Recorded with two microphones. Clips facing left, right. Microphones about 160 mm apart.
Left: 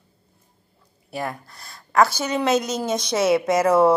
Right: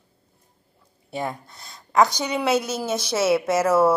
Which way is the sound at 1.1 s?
25° right (ahead or behind).